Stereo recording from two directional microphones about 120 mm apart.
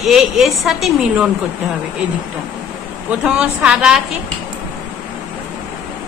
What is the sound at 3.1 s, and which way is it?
Speech, 10° right (ahead or behind).